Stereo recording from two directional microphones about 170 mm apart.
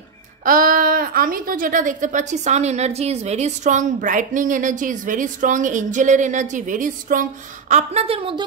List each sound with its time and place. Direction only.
0.5 s a woman's voice: 55° right (ahead or behind); by 8.5 s 30° right (ahead or behind)